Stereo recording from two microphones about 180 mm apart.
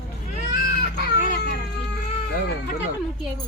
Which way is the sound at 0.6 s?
60° left (ahead or behind).